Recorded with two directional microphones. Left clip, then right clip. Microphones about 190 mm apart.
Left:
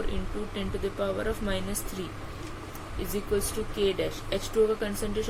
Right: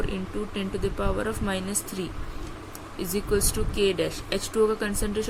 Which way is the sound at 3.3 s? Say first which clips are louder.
Right 3 dB; 45° right (ahead or behind).